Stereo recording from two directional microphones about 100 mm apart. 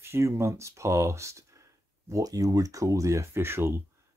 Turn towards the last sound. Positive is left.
turn(degrees=-25)  # may be behind; listen again after turning